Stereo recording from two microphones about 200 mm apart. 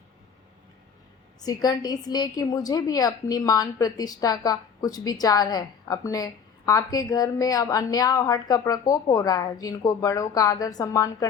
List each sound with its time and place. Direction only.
1.4 s a woman's voice: 20° left (ahead or behind)